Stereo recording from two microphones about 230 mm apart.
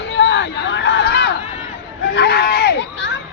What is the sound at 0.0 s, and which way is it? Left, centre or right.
Chatter, left.